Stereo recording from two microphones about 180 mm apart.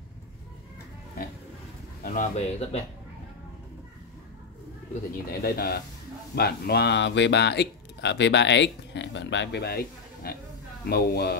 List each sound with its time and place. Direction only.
2.0 s speech: 40° left (ahead or behind)
5.4 s speech: 60° left (ahead or behind)